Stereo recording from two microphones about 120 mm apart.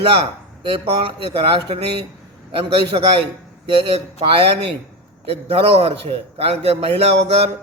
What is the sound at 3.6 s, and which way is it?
A man's voice, 50° right (ahead or behind).